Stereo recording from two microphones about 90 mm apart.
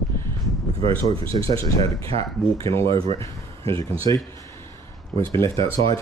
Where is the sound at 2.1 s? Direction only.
90° right.